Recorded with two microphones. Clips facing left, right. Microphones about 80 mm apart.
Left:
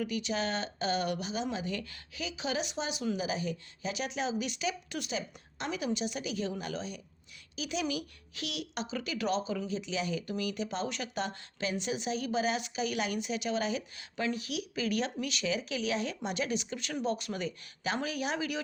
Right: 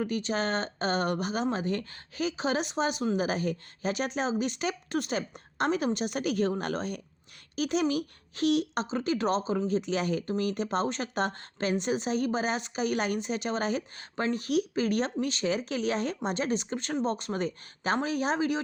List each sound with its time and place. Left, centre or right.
0.0 s speech: right